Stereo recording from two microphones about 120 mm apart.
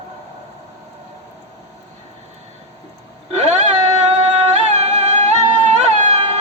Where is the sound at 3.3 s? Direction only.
70° right (ahead or behind).